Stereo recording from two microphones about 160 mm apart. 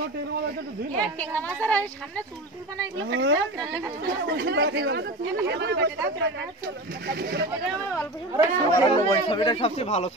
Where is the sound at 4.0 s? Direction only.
90° right.